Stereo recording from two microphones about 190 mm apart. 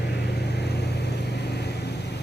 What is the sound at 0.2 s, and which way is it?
Vehicle, 60° left (ahead or behind).